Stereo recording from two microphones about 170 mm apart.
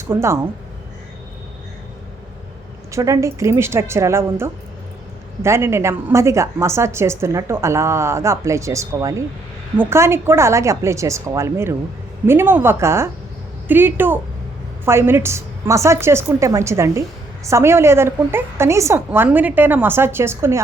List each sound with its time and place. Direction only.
0.1 s a woman's voice: 15° right (ahead or behind)
2.9 s a woman's voice: 20° right (ahead or behind)